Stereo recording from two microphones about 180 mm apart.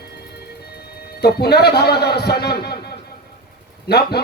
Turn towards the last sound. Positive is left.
turn(degrees=65)  # may be behind; listen again after turning